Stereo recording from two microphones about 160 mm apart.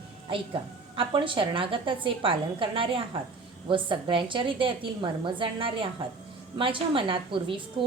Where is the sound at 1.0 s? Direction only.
30° right (ahead or behind).